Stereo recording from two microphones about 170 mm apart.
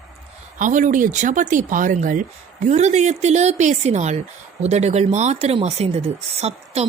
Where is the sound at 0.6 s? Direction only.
50° right (ahead or behind).